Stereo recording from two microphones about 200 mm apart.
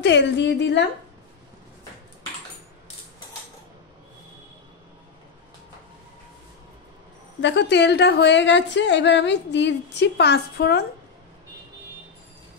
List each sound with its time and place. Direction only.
0.0 s a woman's voice: 60° left (ahead or behind)
7.4 s a woman's voice: 60° left (ahead or behind)